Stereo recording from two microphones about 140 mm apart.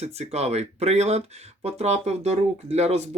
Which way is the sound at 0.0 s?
50° right (ahead or behind).